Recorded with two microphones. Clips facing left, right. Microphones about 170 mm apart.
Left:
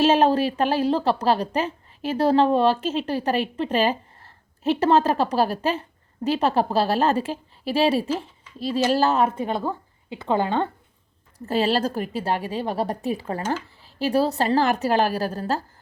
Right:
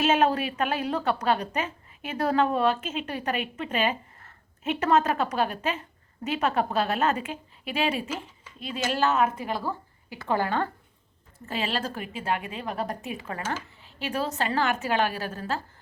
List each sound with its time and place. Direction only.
0.0 s a woman's voice: 30° left (ahead or behind)
11.3 s a woman's voice: 40° left (ahead or behind)